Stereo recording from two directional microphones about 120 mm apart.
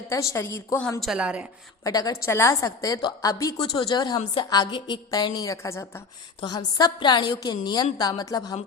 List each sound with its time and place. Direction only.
0.1 s a woman's voice: 25° left (ahead or behind)
1.0 s a woman's voice: 5° right (ahead or behind)
1.8 s a woman's voice: 30° left (ahead or behind)
2.2 s a woman's voice: 20° left (ahead or behind)
6.4 s a woman's voice: 35° left (ahead or behind)